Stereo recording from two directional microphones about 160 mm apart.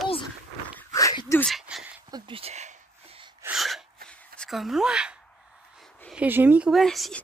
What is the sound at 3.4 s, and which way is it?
Sneeze, centre (ahead or behind).